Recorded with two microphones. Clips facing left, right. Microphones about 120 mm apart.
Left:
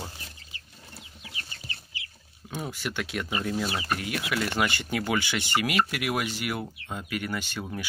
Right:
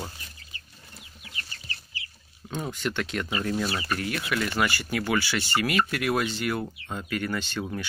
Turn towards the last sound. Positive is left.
turn(degrees=10)  # may be behind; listen again after turning